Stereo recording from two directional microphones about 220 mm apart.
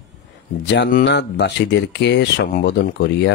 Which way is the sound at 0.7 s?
50° left (ahead or behind).